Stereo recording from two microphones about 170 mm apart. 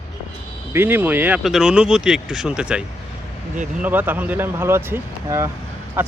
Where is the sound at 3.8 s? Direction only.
10° right (ahead or behind).